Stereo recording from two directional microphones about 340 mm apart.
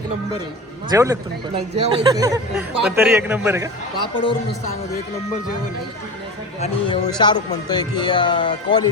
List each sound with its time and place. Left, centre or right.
0.9 s speech: centre
4.0 s speech: centre
6.6 s speech: centre